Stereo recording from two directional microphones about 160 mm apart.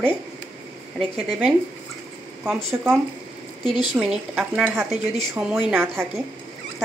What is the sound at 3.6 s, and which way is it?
Speech, 30° left (ahead or behind).